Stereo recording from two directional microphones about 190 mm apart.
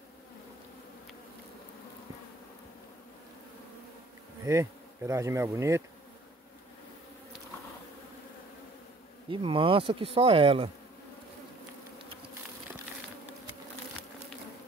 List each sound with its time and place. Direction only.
4.5 s bee: 15° right (ahead or behind)
9.3 s speech: 25° right (ahead or behind)